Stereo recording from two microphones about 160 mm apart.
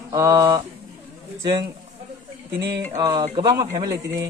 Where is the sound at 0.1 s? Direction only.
20° right (ahead or behind).